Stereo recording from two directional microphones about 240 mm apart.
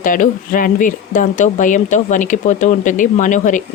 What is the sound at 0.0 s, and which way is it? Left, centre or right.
Speech, left.